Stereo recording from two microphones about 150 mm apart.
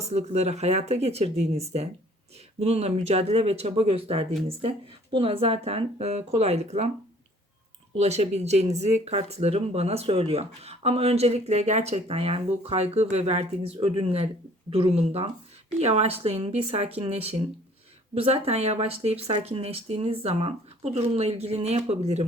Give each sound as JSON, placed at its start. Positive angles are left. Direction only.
{"t": 0.0, "sound": "speech", "side_deg": -45}
{"t": 7.9, "sound": "speech", "side_deg": -45}